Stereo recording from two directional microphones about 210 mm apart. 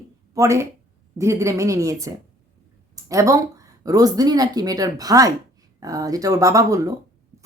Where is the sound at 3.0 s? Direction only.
15° right (ahead or behind).